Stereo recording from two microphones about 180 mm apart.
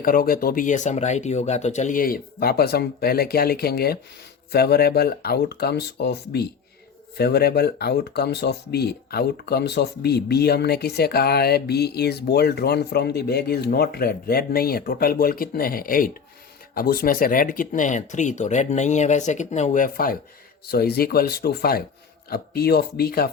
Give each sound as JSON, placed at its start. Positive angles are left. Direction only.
{"t": 0.0, "sound": "speech", "side_deg": 55}